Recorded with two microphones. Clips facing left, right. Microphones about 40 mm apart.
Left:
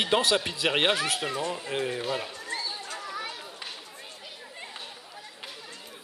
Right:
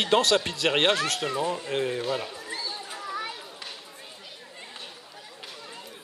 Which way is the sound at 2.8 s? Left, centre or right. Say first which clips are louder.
Right 2 dB; centre.